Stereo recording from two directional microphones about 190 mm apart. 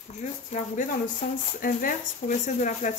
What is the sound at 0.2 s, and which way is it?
A woman's voice, 40° left (ahead or behind).